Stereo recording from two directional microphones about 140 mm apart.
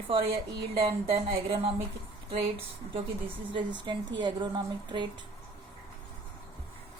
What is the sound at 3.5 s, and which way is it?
A woman's voice, 35° right (ahead or behind).